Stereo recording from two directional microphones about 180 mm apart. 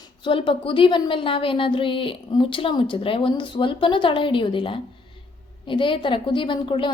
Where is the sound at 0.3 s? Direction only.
30° left (ahead or behind).